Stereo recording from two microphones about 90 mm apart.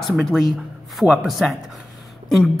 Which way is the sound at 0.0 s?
Centre (ahead or behind).